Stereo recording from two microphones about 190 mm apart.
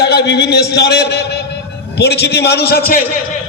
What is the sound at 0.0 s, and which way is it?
A man's voice, 60° left (ahead or behind).